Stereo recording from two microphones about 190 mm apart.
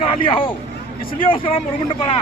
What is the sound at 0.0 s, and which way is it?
Speech, 30° left (ahead or behind).